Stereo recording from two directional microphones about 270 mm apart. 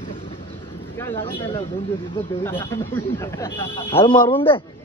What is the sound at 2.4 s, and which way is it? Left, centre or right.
Speech, centre.